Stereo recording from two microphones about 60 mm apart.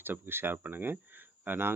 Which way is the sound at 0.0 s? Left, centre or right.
Right.